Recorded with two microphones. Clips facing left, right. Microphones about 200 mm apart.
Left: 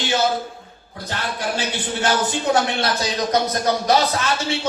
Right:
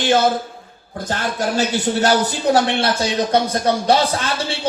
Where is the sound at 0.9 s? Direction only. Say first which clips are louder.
Right 5 dB; 45° right (ahead or behind).